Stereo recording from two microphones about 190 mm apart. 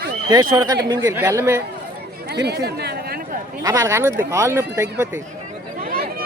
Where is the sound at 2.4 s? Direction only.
60° right (ahead or behind).